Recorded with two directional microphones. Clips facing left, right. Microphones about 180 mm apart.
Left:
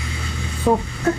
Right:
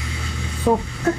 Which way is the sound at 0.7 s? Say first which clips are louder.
Even; 10° right (ahead or behind).